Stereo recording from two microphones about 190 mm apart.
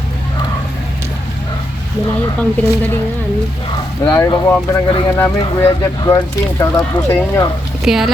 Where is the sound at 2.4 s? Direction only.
10° left (ahead or behind).